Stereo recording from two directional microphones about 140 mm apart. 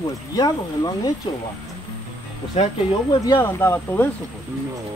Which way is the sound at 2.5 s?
50° left (ahead or behind).